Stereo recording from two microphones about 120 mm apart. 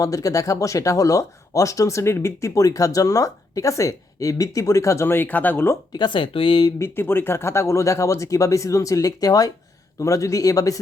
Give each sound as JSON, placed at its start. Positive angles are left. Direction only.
{"t": 0.0, "sound": "speech", "side_deg": 30}
{"t": 5.9, "sound": "speech", "side_deg": 40}
{"t": 6.7, "sound": "speech", "side_deg": 20}